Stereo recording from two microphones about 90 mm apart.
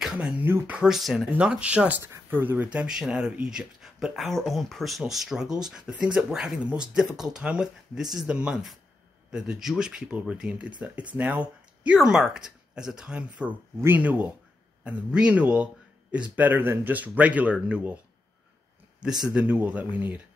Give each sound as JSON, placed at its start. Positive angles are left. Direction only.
{"t": 0.0, "sound": "a sound", "side_deg": -10}
{"t": 0.4, "sound": "speech", "side_deg": -15}
{"t": 0.8, "sound": "speech", "side_deg": -5}
{"t": 2.0, "sound": "speech", "side_deg": -25}
{"t": 19.2, "sound": "speech", "side_deg": -15}